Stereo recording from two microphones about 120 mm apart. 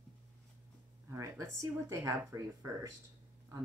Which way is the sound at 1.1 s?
25° right (ahead or behind).